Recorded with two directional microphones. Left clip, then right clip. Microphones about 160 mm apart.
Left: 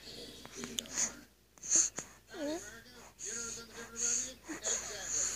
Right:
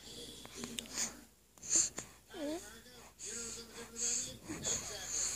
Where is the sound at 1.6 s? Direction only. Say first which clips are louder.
Left 3 dB; 15° right (ahead or behind).